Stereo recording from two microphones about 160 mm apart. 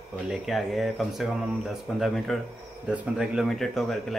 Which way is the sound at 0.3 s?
Centre (ahead or behind).